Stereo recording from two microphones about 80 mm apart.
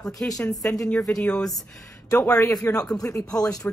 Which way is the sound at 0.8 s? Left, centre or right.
Centre.